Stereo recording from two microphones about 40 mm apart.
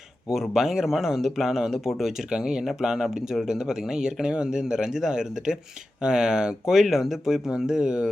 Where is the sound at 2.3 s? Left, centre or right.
Centre.